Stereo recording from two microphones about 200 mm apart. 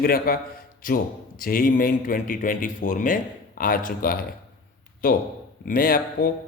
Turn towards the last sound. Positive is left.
turn(degrees=45)  # may be behind; listen again after turning